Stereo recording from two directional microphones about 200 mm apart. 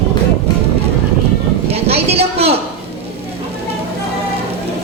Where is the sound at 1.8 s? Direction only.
30° right (ahead or behind).